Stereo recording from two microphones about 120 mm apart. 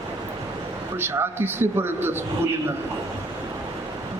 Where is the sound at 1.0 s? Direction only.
20° right (ahead or behind).